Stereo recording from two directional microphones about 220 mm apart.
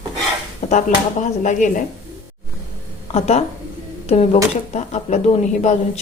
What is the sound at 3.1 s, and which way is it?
A woman's voice, 30° left (ahead or behind).